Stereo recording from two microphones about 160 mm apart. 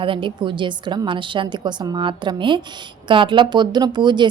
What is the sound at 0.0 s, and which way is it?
A woman's voice, 30° right (ahead or behind).